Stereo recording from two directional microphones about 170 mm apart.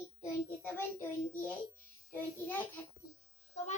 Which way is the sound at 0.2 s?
15° left (ahead or behind).